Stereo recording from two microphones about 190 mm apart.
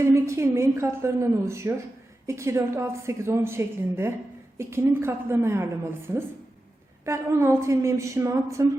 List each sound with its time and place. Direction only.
0.0 s a woman's voice: 15° right (ahead or behind)